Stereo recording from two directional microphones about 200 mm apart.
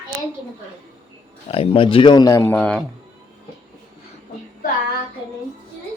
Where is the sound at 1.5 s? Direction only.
30° left (ahead or behind); by 2.8 s 5° left (ahead or behind).